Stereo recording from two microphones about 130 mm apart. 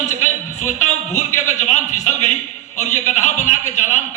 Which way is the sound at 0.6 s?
65° left (ahead or behind).